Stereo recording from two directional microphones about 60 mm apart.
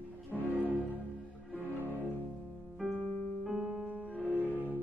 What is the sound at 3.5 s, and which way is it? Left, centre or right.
Music, centre.